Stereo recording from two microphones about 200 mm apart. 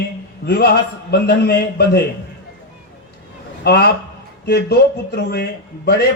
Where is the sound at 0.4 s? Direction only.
55° left (ahead or behind).